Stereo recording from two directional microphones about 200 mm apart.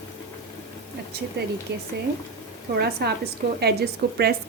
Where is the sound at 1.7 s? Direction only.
60° right (ahead or behind).